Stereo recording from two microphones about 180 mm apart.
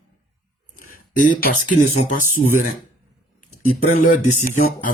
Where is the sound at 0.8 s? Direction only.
45° left (ahead or behind).